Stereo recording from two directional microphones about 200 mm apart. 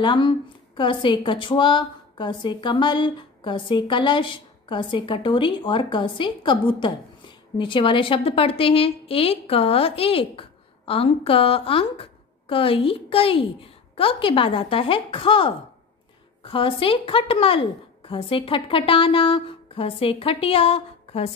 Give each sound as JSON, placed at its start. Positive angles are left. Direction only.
{"t": 0.0, "sound": "speech", "side_deg": 25}